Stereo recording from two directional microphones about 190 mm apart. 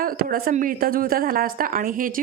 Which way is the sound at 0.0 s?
50° right (ahead or behind).